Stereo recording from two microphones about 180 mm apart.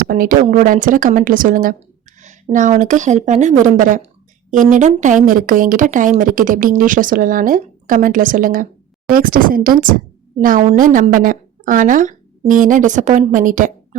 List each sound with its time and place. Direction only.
0.0 s speech: 55° right (ahead or behind)